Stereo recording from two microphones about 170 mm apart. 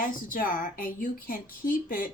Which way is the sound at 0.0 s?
55° left (ahead or behind).